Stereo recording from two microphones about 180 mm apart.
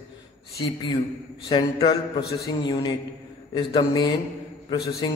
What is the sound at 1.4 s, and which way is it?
Speech, 25° left (ahead or behind).